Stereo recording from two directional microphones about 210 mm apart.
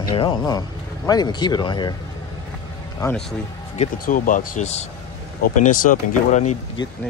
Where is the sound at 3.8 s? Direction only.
40° left (ahead or behind).